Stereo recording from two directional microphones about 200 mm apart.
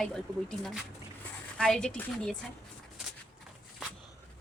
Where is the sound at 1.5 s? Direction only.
5° left (ahead or behind).